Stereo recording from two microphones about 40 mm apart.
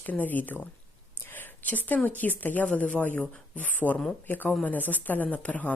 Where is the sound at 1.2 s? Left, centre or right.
Left.